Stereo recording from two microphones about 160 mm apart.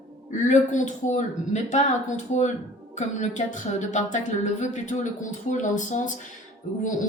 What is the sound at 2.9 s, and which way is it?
A woman's voice, 50° left (ahead or behind).